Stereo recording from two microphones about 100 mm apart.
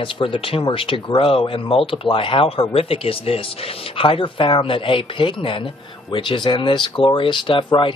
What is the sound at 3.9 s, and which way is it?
Speech, 60° left (ahead or behind).